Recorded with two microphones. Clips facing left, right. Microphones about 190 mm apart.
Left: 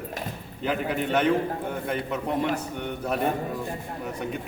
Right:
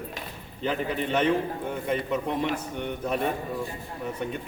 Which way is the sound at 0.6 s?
5° left (ahead or behind).